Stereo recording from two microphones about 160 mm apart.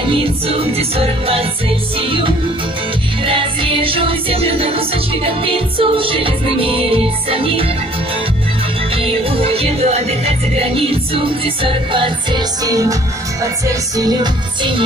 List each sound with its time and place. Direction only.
0.1 s music: 35° right (ahead or behind)
8.9 s music: 35° right (ahead or behind)
13.9 s music: 25° right (ahead or behind)